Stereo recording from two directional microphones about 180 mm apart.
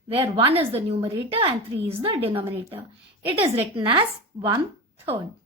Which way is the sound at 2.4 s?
15° right (ahead or behind).